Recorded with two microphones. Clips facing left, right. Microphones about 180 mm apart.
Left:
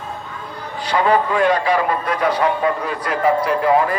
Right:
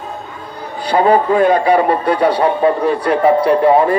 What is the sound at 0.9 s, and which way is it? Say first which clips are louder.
A man's voice: right 5 dB; 35° right (ahead or behind).